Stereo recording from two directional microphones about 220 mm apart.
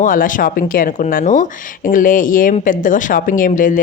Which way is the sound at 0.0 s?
35° left (ahead or behind).